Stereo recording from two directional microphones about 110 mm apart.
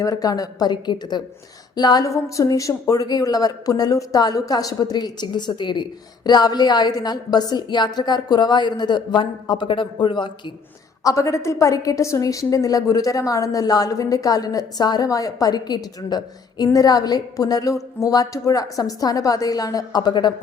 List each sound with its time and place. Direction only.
0.0 s a woman's voice: 35° left (ahead or behind)
11.0 s a woman's voice: 30° left (ahead or behind)